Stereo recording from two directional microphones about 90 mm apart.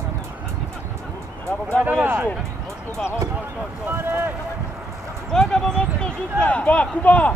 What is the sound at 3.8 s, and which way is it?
Speech, 25° right (ahead or behind).